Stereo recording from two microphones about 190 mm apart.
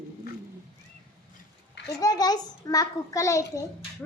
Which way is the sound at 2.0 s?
20° left (ahead or behind).